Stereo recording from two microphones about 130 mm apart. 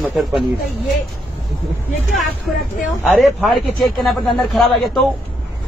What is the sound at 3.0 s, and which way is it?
A man's voice, centre (ahead or behind).